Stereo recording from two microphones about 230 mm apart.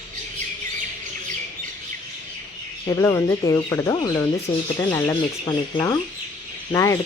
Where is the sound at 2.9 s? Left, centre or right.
Centre.